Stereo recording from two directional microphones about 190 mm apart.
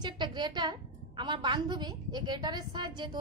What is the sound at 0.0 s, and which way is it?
A woman's voice, 25° right (ahead or behind).